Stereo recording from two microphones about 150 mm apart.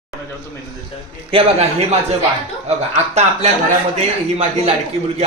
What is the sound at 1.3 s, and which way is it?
Speech, 40° right (ahead or behind).